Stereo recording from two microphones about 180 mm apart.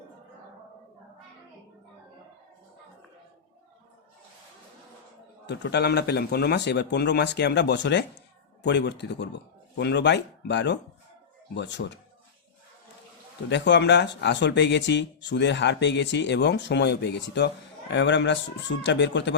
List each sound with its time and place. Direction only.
5.5 s speech: 70° left (ahead or behind)
13.5 s speech: 75° left (ahead or behind)